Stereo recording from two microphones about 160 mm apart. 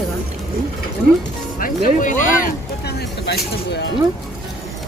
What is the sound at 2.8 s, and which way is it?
Speech, 90° left.